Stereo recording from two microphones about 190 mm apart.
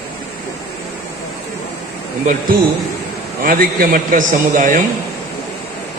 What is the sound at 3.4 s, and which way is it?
A man's voice, 45° right (ahead or behind).